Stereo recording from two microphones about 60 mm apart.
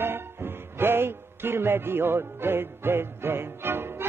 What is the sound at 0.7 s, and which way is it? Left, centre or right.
Music, right.